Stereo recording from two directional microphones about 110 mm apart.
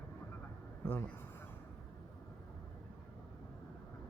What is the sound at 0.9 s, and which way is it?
Speech, 20° left (ahead or behind).